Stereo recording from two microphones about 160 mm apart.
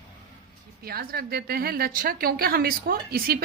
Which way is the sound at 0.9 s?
75° right (ahead or behind).